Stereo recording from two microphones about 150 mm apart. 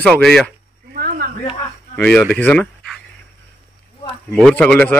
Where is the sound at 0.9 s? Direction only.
85° right.